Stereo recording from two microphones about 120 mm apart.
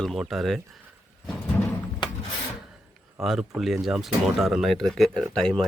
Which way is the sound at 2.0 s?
40° left (ahead or behind).